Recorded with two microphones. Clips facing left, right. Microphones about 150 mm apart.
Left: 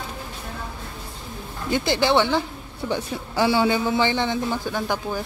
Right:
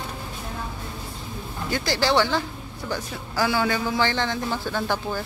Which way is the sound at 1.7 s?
20° left (ahead or behind).